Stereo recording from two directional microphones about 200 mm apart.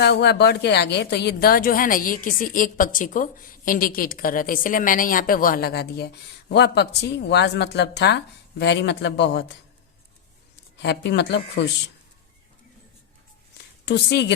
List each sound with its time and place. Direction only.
0.0 s a woman's voice: 55° left (ahead or behind)
10.8 s speech: 55° left (ahead or behind)
13.8 s speech: 55° left (ahead or behind)